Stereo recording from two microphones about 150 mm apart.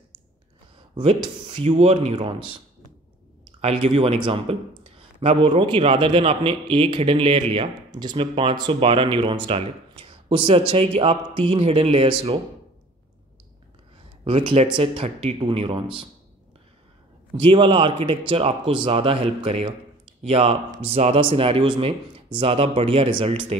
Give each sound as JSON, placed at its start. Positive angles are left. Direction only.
{"t": 0.9, "sound": "speech", "side_deg": -35}
{"t": 3.6, "sound": "speech", "side_deg": -40}
{"t": 14.2, "sound": "speech", "side_deg": -35}
{"t": 17.4, "sound": "speech", "side_deg": -35}